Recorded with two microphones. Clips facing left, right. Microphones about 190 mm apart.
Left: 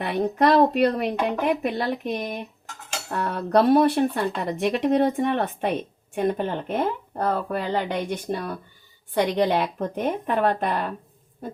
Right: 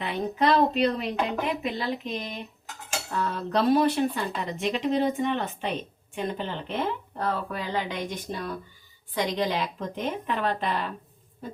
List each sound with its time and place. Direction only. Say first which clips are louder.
0.0 s speech: left 5 dB; 55° left (ahead or behind)